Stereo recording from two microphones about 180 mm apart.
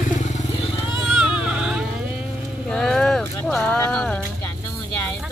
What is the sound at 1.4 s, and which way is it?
Music, 5° right (ahead or behind).